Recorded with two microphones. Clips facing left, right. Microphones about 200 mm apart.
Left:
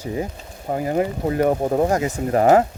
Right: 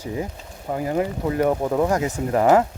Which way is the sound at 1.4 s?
40° left (ahead or behind).